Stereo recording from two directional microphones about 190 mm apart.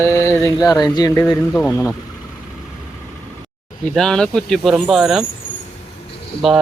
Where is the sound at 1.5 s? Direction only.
10° left (ahead or behind).